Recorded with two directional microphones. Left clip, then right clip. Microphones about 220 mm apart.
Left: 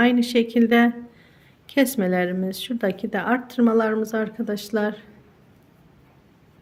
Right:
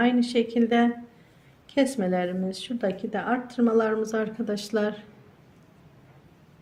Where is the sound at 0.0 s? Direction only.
25° left (ahead or behind).